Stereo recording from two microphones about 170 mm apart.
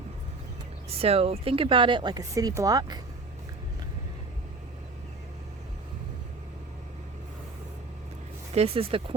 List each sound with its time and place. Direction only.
1.0 s speech: 35° right (ahead or behind)
8.5 s speech: 35° right (ahead or behind)